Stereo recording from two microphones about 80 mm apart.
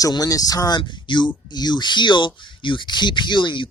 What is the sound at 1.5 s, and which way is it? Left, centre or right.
Speech, left.